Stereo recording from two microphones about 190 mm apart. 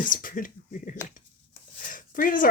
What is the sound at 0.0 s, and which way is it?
Speech, 45° left (ahead or behind).